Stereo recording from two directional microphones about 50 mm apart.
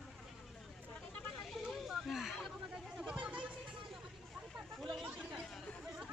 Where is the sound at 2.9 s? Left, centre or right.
Centre.